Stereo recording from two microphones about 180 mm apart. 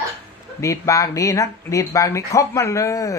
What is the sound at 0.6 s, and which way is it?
Speech, 15° left (ahead or behind).